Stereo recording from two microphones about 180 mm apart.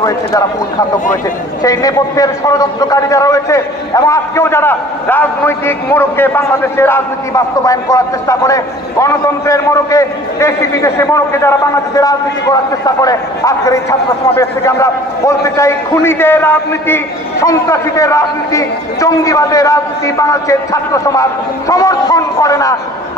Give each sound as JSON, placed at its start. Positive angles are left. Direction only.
{"t": 1.6, "sound": "a man's voice", "side_deg": 20}